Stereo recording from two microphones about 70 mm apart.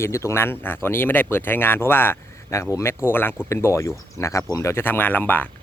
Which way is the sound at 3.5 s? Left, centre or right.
Left.